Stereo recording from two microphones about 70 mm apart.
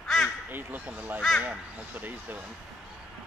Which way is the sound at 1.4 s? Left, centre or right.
Right.